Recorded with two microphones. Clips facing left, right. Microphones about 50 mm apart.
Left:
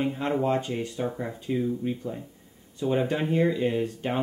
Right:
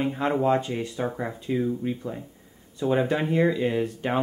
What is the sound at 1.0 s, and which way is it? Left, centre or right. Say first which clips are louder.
Speech: right 2 dB; centre.